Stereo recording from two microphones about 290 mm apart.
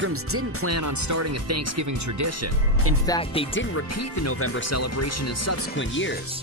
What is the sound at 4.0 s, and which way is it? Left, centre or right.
Speech, left.